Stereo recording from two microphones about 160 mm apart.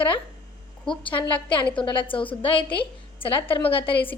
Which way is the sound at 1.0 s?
30° left (ahead or behind).